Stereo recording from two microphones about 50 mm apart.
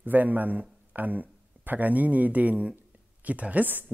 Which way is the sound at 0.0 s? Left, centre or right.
Right.